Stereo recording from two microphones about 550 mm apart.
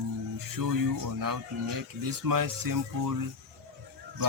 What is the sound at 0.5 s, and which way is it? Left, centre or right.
Speech, right.